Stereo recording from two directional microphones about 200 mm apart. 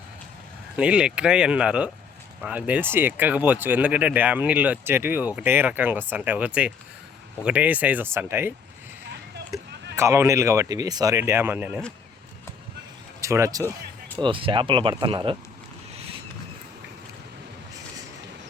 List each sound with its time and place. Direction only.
0.8 s speech: 5° right (ahead or behind)
9.5 s a sound: 20° right (ahead or behind)
9.9 s speech: 15° right (ahead or behind)
13.2 s speech: 15° right (ahead or behind)